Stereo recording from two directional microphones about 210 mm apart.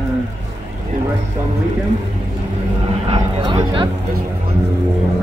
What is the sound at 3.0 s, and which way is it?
Speech, 20° right (ahead or behind).